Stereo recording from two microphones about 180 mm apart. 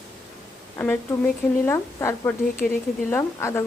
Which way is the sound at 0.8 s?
10° left (ahead or behind).